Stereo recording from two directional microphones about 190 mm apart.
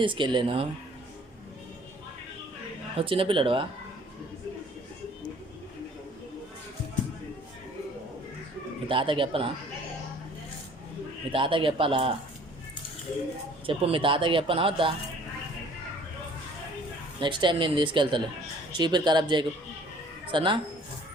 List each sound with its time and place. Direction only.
0.0 s speech: 25° right (ahead or behind)
3.0 s speech: 30° right (ahead or behind)
8.9 s speech: 25° right (ahead or behind)
11.3 s speech: 25° right (ahead or behind)
13.7 s speech: 25° right (ahead or behind)
17.2 s speech: 25° right (ahead or behind)